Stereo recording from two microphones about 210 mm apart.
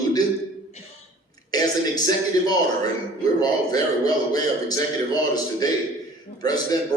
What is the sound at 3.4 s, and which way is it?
A man's voice, 20° left (ahead or behind).